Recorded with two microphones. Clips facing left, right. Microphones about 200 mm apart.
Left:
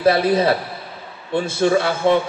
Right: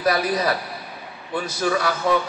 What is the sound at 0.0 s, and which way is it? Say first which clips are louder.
A man's voice: left 6 dB; 25° left (ahead or behind).